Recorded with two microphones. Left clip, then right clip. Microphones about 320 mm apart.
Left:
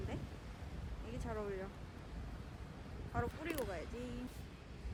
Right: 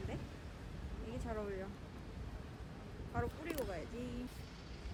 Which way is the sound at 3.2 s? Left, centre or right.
Centre.